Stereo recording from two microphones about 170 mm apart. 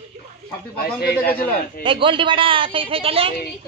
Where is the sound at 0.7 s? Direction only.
65° left (ahead or behind).